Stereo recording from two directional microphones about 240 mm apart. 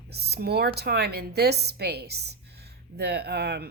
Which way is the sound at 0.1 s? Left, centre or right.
Right.